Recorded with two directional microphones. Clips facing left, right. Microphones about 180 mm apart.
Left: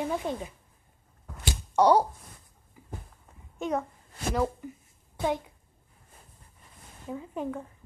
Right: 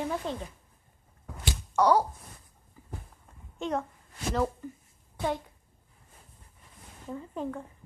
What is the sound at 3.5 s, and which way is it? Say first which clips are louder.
A child's voice: left 1 dB; 5° left (ahead or behind).